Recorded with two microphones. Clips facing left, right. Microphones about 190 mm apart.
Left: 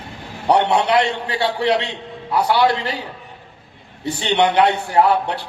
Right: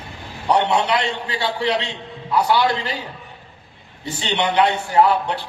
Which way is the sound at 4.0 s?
60° left (ahead or behind).